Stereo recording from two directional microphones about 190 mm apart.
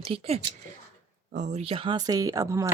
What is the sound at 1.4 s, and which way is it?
Speech, 35° right (ahead or behind).